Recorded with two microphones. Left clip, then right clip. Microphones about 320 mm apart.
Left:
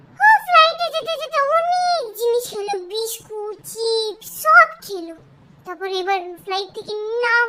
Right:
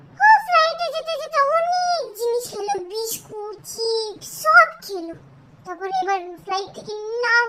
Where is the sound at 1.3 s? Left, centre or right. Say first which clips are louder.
Left 1 dB; centre.